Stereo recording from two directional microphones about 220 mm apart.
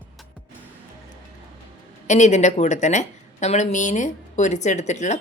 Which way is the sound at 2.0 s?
30° left (ahead or behind).